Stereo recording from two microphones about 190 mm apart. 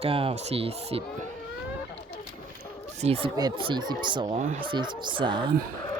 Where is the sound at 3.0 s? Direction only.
35° right (ahead or behind).